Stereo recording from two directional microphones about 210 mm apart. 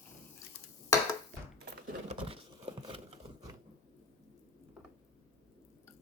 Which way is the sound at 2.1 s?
25° right (ahead or behind).